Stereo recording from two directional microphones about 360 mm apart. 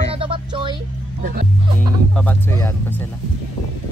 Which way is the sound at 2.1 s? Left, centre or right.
Centre.